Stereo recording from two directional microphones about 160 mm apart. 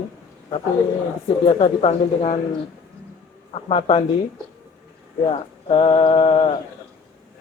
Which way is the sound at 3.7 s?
35° left (ahead or behind).